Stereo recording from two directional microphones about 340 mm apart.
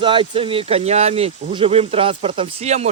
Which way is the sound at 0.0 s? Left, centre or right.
Centre.